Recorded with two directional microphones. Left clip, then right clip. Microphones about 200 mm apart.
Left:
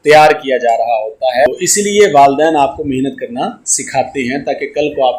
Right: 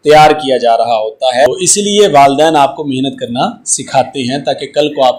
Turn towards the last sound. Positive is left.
turn(degrees=-25)  # may be behind; listen again after turning